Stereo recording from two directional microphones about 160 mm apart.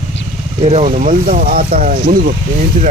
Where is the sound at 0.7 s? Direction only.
40° right (ahead or behind).